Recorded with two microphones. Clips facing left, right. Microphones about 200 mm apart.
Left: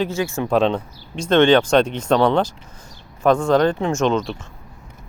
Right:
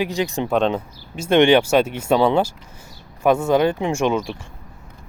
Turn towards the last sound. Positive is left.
turn(degrees=-10)  # may be behind; listen again after turning